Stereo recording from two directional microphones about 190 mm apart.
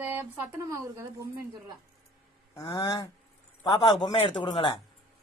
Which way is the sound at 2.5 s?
15° left (ahead or behind).